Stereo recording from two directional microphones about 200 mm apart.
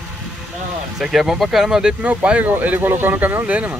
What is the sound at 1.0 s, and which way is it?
Speech, centre (ahead or behind).